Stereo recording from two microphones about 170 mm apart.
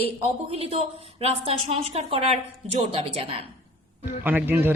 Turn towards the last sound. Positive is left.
turn(degrees=-10)  # may be behind; listen again after turning